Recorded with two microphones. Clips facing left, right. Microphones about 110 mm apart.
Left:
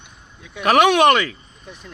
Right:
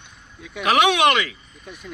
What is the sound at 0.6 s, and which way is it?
Speech, 50° left (ahead or behind).